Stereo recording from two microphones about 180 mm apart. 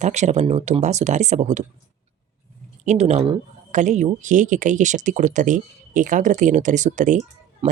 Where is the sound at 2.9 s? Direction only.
40° right (ahead or behind).